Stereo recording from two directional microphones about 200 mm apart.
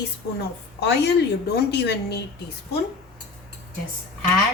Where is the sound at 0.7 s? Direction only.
55° left (ahead or behind).